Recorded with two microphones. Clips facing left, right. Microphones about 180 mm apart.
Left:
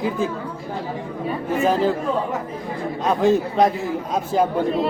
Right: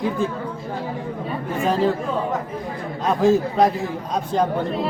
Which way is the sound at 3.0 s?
Centre (ahead or behind).